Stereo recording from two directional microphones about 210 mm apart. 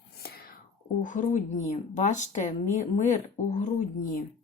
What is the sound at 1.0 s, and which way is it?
Speech, 35° left (ahead or behind).